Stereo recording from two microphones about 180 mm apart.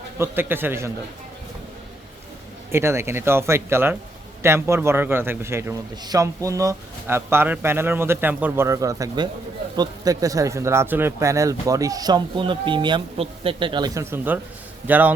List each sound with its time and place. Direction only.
0.2 s a man's voice: 10° right (ahead or behind)
2.7 s a man's voice: 15° right (ahead or behind)